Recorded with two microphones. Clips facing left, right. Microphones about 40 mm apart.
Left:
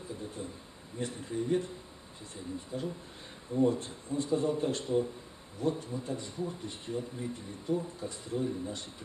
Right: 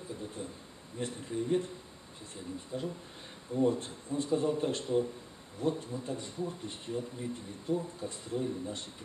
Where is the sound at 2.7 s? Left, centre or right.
Centre.